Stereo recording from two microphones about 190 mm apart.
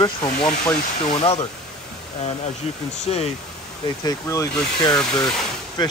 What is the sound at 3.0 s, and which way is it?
Speech, 35° left (ahead or behind).